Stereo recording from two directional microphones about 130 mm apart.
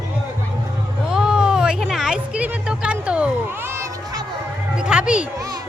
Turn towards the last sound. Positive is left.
turn(degrees=-10)  # may be behind; listen again after turning